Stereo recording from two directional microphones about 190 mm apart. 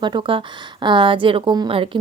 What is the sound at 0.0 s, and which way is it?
A woman's voice, 25° right (ahead or behind).